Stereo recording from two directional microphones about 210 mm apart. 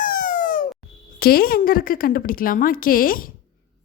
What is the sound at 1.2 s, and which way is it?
Speech, 45° left (ahead or behind).